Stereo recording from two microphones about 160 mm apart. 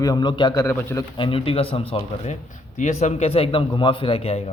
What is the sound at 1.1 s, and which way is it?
Speech, 35° left (ahead or behind).